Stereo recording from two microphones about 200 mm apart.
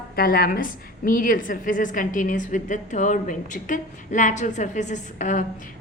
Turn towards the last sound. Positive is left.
turn(degrees=40)  # may be behind; listen again after turning